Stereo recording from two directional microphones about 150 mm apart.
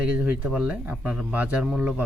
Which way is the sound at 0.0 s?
10° right (ahead or behind).